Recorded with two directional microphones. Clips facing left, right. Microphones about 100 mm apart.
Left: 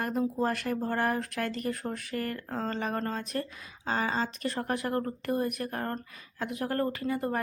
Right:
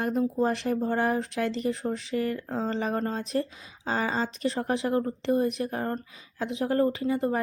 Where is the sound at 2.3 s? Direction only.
20° right (ahead or behind).